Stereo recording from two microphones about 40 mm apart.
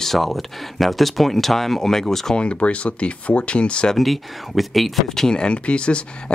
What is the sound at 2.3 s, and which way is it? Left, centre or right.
Speech, left.